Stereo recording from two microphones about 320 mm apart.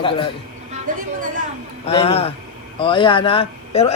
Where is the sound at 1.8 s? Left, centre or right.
Centre.